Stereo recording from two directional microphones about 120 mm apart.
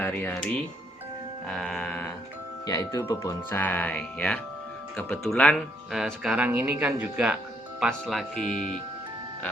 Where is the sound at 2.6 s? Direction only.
30° left (ahead or behind).